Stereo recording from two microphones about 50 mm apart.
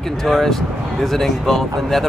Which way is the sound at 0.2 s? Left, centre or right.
Centre.